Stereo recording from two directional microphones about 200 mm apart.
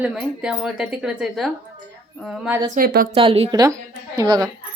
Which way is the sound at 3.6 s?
15° right (ahead or behind).